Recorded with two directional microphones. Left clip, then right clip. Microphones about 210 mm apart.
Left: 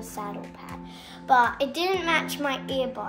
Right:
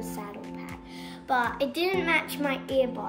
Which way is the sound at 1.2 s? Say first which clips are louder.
Left 6 dB; 15° left (ahead or behind).